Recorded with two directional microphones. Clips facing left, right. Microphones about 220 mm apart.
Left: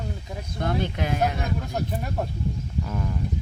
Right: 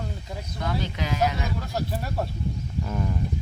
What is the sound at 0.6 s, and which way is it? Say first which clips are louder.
Speech: left 3 dB; 50° left (ahead or behind).